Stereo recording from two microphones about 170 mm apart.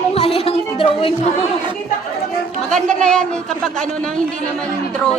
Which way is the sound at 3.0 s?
5° left (ahead or behind).